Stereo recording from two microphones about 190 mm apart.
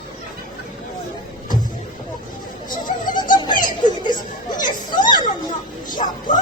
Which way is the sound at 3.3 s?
25° left (ahead or behind).